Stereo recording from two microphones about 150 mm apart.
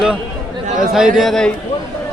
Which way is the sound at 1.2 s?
Centre (ahead or behind).